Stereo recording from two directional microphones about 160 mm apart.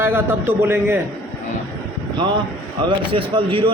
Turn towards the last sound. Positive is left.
turn(degrees=-35)  # may be behind; listen again after turning